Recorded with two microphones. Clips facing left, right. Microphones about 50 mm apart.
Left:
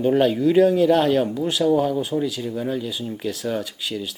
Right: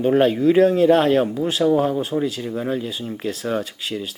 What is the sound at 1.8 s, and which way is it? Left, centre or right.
Speech, right.